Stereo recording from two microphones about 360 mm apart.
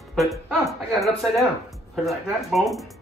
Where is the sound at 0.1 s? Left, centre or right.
Centre.